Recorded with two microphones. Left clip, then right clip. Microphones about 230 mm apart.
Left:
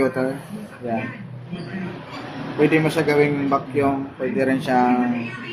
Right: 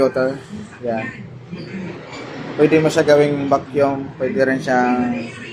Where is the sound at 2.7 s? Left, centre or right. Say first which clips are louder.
Right 6 dB; centre.